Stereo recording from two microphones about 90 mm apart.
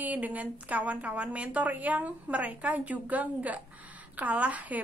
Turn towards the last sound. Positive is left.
turn(degrees=-15)  # may be behind; listen again after turning